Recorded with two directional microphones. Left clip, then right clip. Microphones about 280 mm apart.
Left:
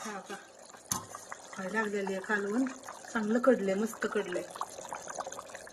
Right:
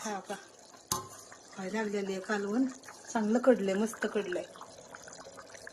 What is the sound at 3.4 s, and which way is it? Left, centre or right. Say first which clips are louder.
Speech: even; centre.